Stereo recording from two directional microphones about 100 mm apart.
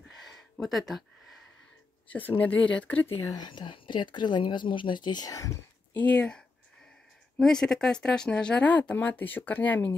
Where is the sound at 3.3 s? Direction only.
45° left (ahead or behind).